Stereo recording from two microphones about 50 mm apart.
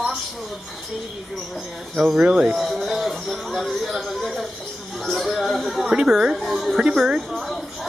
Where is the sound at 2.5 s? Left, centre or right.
Centre.